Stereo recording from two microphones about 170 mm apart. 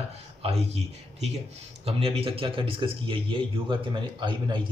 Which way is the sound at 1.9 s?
35° right (ahead or behind).